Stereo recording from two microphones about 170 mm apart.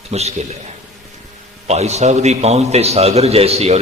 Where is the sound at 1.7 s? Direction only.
40° right (ahead or behind).